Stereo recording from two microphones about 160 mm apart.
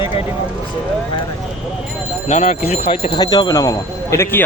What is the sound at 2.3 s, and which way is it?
Speech, 45° left (ahead or behind).